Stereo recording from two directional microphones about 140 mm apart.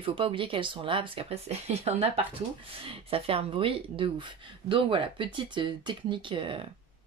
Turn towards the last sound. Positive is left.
turn(degrees=-40)  # may be behind; listen again after turning